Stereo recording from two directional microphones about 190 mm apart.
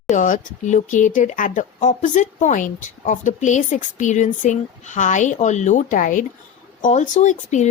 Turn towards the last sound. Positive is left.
turn(degrees=40)  # may be behind; listen again after turning